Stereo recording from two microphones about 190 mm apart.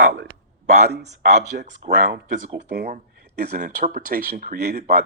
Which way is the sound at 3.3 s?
55° right (ahead or behind).